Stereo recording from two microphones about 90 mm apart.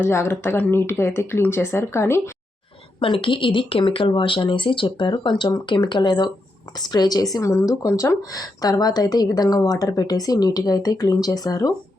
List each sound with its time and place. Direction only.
0.0 s speech: 30° left (ahead or behind)
3.0 s speech: 75° left (ahead or behind); by 11.7 s 40° left (ahead or behind)